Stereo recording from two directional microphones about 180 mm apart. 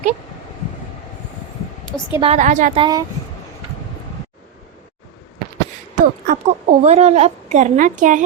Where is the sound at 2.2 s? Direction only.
40° right (ahead or behind).